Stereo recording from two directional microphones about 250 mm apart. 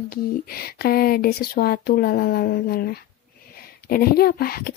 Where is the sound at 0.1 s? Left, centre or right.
Left.